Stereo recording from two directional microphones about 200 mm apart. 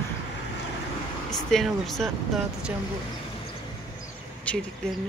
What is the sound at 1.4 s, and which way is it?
Speech, centre (ahead or behind).